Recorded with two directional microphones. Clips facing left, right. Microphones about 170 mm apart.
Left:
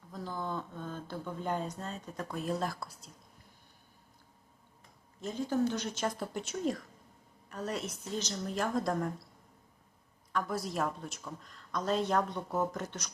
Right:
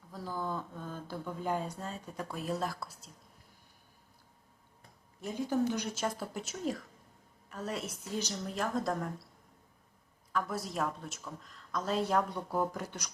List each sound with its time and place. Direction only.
0.1 s speech: 5° right (ahead or behind)
5.2 s speech: 15° right (ahead or behind)
10.3 s speech: centre (ahead or behind)